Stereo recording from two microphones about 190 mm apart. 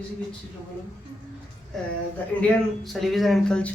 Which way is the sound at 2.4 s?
Centre (ahead or behind).